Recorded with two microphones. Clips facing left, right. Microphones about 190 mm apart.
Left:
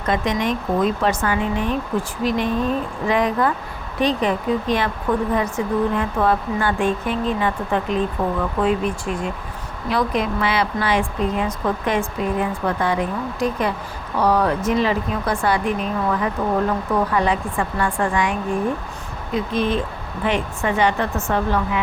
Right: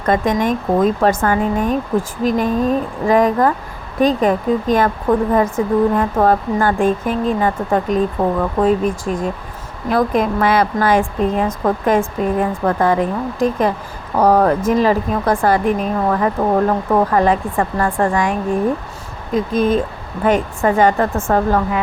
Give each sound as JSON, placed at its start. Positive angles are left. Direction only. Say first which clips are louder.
{"t": 0.0, "sound": "speech", "louder": "right 5 dB", "side_deg": -50}
{"t": 14.2, "sound": "speech", "louder": "right 5 dB", "side_deg": -50}